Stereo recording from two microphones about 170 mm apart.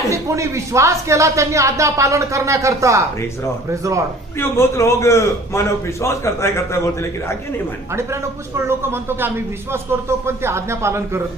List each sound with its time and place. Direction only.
0.1 s speech: 15° right (ahead or behind)
4.4 s a man's voice: 15° left (ahead or behind)
7.9 s speech: 15° right (ahead or behind)